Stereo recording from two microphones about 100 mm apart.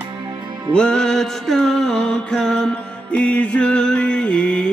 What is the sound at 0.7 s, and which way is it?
Music, 10° left (ahead or behind).